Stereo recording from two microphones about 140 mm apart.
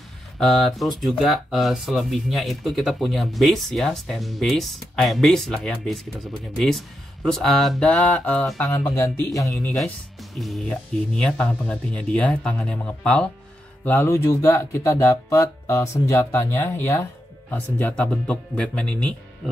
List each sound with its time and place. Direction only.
0.4 s speech: 5° left (ahead or behind)
7.2 s speech: 5° left (ahead or behind); by 9.8 s 20° left (ahead or behind)
10.4 s speech: 5° left (ahead or behind)